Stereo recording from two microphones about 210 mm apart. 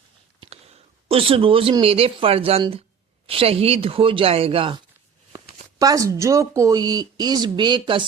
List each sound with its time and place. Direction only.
0.3 s speech: 25° right (ahead or behind)
5.8 s speech: 15° right (ahead or behind)